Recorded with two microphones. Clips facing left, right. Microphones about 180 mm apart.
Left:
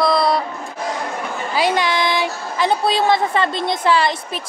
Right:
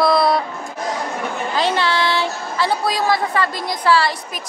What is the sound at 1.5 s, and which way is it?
A woman's voice, 15° left (ahead or behind).